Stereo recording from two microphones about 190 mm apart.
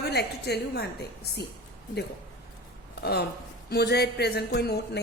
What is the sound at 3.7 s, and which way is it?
Speech, 60° left (ahead or behind).